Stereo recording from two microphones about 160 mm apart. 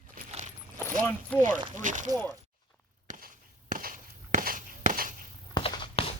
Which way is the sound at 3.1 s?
60° right (ahead or behind).